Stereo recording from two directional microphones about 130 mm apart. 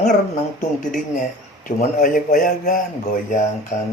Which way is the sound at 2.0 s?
90° left.